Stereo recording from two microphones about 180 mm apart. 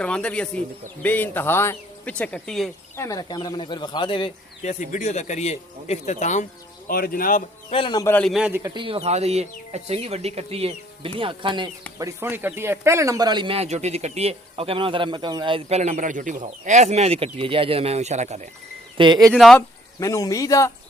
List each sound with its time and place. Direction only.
0.0 s speech: 5° left (ahead or behind)
2.9 s speech: 15° left (ahead or behind)
4.6 s a man's voice: 40° left (ahead or behind)
6.8 s a man's voice: 55° left (ahead or behind)
7.7 s speech: 30° left (ahead or behind)
8.0 s a man's voice: 5° left (ahead or behind)
8.6 s speech: 25° right (ahead or behind)
11.9 s speech: 15° right (ahead or behind); by 18.4 s 40° right (ahead or behind)
18.9 s speech: 25° right (ahead or behind)
19.3 s a man's voice: 5° left (ahead or behind)
20.0 s speech: 15° left (ahead or behind)